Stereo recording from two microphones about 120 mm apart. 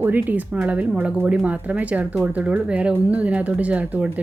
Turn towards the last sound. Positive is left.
turn(degrees=-15)  # may be behind; listen again after turning